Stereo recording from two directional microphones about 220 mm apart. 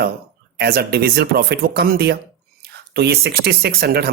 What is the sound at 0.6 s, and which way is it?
Speech, 45° right (ahead or behind).